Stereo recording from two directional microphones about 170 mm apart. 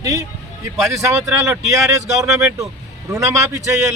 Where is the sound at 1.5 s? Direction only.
20° right (ahead or behind).